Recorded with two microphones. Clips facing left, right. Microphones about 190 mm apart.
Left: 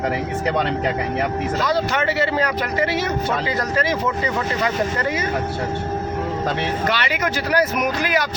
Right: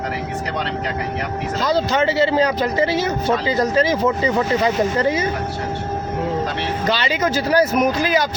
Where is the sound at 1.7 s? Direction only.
25° right (ahead or behind).